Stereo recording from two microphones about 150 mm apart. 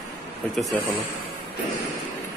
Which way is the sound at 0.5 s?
Centre (ahead or behind).